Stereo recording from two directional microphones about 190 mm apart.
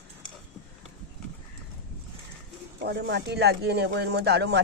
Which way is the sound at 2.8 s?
60° right (ahead or behind).